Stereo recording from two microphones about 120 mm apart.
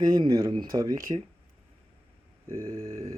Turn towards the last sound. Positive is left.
turn(degrees=-25)  # may be behind; listen again after turning